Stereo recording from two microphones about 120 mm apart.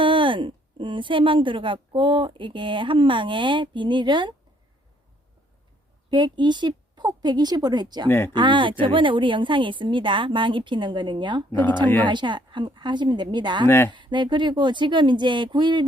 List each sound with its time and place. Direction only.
0.0 s a woman's voice: 45° right (ahead or behind)
6.1 s a woman's voice: 40° right (ahead or behind)
13.7 s speech: 20° left (ahead or behind)
13.9 s a woman's voice: 40° right (ahead or behind)